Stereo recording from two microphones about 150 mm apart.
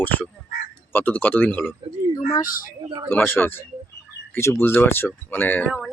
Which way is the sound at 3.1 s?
15° left (ahead or behind).